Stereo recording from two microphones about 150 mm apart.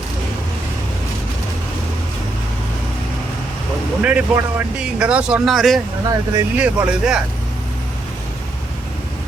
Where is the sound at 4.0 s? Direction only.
10° right (ahead or behind).